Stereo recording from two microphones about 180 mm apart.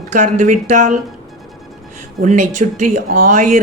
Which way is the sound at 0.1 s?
45° right (ahead or behind).